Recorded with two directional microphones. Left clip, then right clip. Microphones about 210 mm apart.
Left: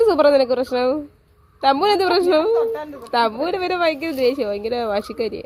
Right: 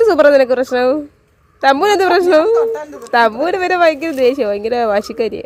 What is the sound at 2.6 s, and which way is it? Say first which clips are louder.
Speech: right 5 dB; 50° right (ahead or behind).